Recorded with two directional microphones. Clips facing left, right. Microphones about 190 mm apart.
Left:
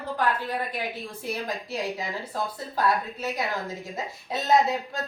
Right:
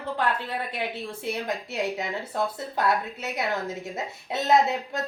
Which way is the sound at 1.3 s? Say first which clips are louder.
Even; 25° right (ahead or behind).